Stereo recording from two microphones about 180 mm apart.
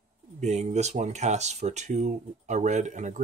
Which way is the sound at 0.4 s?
40° right (ahead or behind).